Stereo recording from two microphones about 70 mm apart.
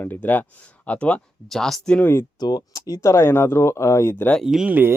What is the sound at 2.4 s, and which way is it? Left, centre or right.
Speech, left.